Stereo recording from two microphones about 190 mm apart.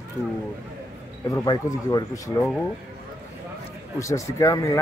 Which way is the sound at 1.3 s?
20° left (ahead or behind).